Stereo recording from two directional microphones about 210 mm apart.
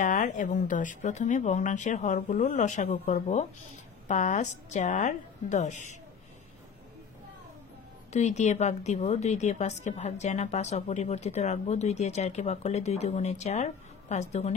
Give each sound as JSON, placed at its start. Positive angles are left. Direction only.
{"t": 0.0, "sound": "a woman's voice", "side_deg": 35}
{"t": 8.1, "sound": "a woman's voice", "side_deg": 35}